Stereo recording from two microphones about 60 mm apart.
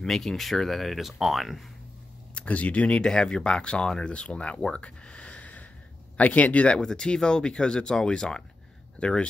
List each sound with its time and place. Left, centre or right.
0.0 s speech: centre
2.3 s speech: left
4.7 s a sound: centre
6.1 s speech: left